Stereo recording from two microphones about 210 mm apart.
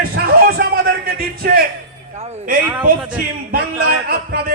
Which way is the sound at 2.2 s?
30° right (ahead or behind).